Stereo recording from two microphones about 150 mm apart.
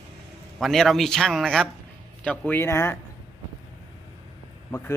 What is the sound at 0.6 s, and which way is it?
A man's voice, centre (ahead or behind).